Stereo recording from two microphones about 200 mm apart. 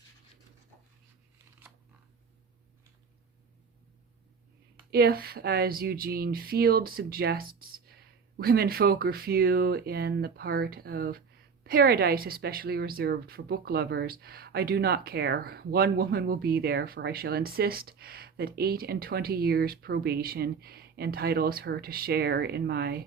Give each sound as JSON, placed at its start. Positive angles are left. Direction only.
{"t": 4.9, "sound": "a woman's voice", "side_deg": -50}